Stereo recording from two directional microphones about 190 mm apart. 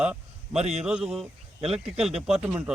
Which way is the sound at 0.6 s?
35° right (ahead or behind).